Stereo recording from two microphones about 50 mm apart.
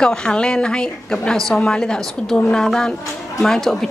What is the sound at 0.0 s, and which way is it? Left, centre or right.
A woman's voice, centre.